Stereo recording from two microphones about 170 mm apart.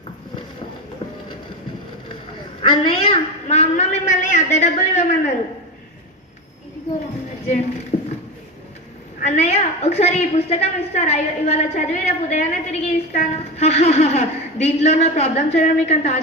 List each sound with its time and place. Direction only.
2.6 s a woman's voice: 30° left (ahead or behind)
7.9 s a sound: 40° left (ahead or behind)
9.2 s a woman's voice: 40° left (ahead or behind)